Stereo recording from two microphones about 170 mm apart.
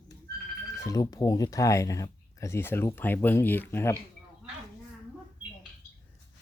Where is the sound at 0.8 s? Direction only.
20° left (ahead or behind).